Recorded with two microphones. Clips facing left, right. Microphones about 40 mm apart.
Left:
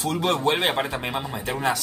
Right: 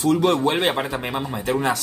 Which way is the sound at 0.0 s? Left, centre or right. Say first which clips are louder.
Right 5 dB; centre.